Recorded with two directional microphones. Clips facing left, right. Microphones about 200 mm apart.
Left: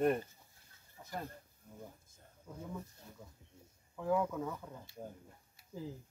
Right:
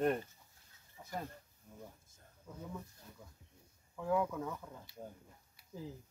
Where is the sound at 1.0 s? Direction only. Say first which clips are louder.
Even; centre (ahead or behind).